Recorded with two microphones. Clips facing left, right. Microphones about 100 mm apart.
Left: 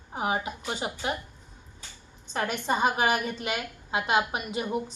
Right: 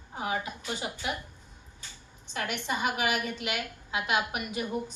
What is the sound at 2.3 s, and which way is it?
A woman's voice, 40° left (ahead or behind).